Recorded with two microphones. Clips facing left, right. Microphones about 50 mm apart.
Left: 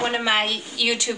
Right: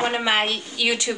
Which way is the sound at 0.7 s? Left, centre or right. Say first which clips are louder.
Right 1 dB; centre.